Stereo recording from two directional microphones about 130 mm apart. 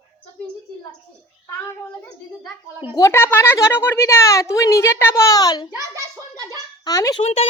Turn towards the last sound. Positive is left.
turn(degrees=55)  # may be behind; listen again after turning